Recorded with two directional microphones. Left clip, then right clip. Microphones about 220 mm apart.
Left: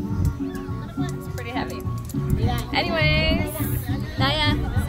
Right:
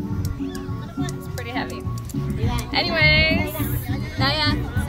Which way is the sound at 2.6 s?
Centre (ahead or behind).